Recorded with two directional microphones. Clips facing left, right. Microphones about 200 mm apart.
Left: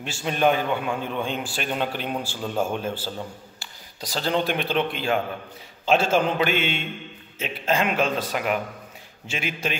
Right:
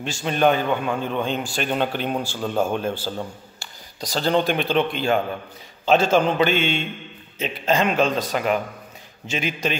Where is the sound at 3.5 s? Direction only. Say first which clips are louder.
Right 4 dB; 5° left (ahead or behind).